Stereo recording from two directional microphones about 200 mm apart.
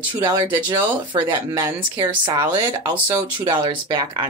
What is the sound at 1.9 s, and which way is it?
Speech, 25° right (ahead or behind).